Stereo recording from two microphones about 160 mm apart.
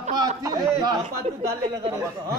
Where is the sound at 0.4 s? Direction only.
20° right (ahead or behind).